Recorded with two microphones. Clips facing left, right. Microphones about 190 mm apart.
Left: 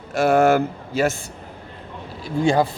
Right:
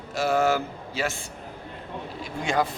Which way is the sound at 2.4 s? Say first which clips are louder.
Left 7 dB; 30° left (ahead or behind).